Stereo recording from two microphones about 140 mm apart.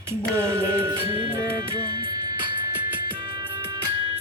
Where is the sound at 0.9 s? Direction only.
40° right (ahead or behind).